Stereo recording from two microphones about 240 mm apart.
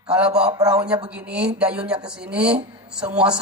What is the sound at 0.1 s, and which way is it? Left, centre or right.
Speech, centre.